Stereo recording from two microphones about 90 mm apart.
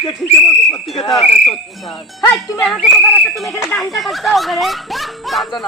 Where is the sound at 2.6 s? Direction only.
5° left (ahead or behind).